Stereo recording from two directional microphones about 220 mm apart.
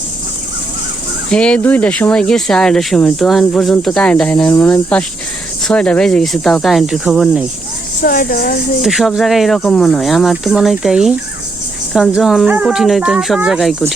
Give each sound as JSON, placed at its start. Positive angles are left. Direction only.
{"t": 1.3, "sound": "speech", "side_deg": 5}
{"t": 8.0, "sound": "speech", "side_deg": 40}
{"t": 8.8, "sound": "speech", "side_deg": 0}